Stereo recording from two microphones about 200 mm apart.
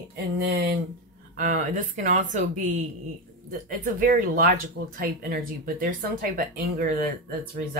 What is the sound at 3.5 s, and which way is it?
Speech, 45° right (ahead or behind).